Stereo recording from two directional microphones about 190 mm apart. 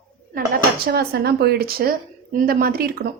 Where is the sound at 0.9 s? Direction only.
55° right (ahead or behind).